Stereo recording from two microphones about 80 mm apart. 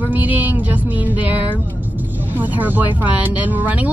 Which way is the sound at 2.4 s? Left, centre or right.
Right.